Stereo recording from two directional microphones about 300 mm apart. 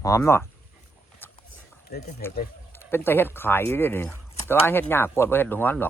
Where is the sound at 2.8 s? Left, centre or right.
Centre.